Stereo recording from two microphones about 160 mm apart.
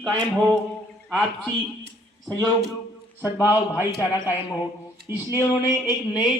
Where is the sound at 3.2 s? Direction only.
15° left (ahead or behind).